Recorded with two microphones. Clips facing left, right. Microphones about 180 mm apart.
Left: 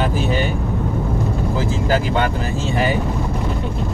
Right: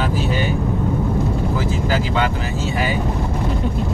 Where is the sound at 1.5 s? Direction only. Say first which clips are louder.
Left 1 dB; 45° left (ahead or behind).